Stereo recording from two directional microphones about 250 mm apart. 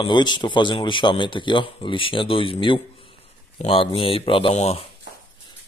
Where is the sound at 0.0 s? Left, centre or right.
Centre.